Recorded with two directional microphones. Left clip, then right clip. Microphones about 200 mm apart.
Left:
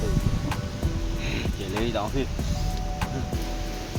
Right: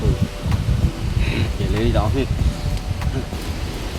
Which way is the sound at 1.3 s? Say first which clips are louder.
Right 6 dB; 15° left (ahead or behind).